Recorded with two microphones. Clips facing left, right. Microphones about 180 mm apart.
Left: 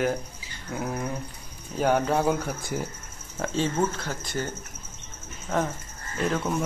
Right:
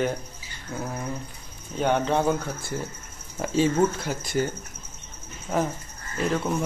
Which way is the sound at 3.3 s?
10° right (ahead or behind).